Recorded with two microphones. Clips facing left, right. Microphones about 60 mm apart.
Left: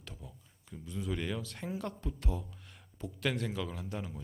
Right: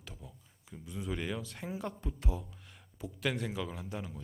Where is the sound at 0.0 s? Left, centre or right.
Centre.